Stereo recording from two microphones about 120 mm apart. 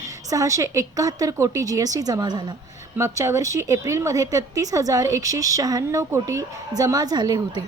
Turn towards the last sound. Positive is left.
turn(degrees=-30)  # may be behind; listen again after turning